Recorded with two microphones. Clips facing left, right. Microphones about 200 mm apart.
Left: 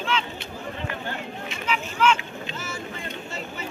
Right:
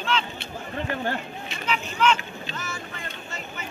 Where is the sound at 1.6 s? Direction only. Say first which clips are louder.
Left 1 dB; 5° left (ahead or behind).